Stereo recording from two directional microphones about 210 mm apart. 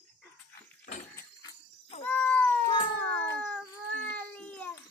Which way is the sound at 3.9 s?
60° left (ahead or behind).